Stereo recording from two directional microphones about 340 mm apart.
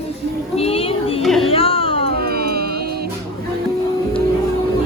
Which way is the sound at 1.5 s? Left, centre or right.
Centre.